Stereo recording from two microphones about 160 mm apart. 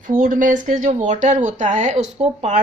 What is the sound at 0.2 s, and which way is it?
Speech, 55° right (ahead or behind).